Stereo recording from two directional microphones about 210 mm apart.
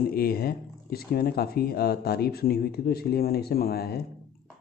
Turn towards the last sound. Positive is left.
turn(degrees=45)  # may be behind; listen again after turning